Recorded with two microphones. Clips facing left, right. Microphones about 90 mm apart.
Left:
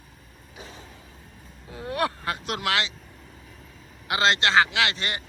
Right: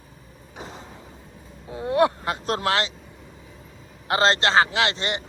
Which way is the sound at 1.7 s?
25° right (ahead or behind).